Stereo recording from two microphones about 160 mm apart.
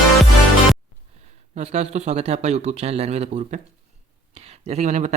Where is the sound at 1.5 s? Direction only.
45° right (ahead or behind).